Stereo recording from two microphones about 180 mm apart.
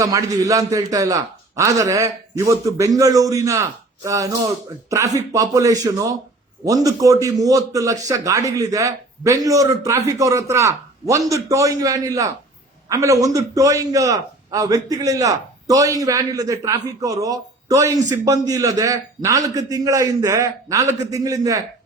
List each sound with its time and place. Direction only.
0.0 s a man's voice: 20° right (ahead or behind)